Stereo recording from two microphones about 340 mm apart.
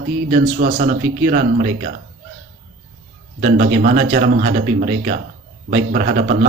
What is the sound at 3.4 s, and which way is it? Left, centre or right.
Speech, right.